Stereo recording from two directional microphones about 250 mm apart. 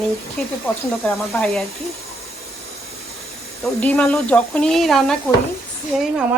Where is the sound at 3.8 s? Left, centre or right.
Centre.